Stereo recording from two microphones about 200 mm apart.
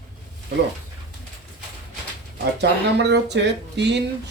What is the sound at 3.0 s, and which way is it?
Speech, 60° right (ahead or behind).